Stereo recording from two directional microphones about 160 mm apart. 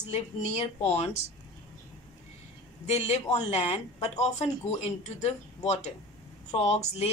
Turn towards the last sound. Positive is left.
turn(degrees=40)  # may be behind; listen again after turning